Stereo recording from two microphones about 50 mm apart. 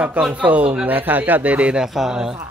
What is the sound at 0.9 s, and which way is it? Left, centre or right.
Speech, right.